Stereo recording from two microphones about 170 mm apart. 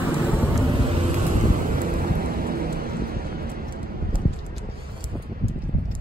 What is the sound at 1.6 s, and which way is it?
Vehicle, 55° right (ahead or behind).